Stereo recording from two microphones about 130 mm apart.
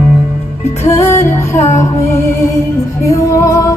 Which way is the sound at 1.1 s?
20° left (ahead or behind).